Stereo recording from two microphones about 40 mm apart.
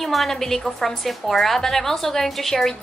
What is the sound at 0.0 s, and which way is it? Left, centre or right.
A woman's voice, centre.